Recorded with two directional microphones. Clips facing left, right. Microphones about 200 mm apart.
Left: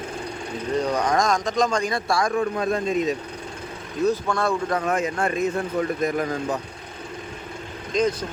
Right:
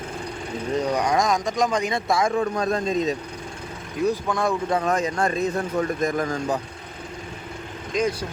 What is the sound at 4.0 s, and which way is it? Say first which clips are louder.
Speech: left 1 dB; 15° right (ahead or behind).